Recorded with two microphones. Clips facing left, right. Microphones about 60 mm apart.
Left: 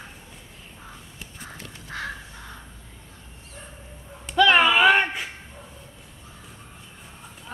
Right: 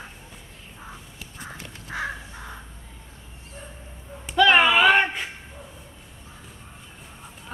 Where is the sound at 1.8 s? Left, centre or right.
Centre.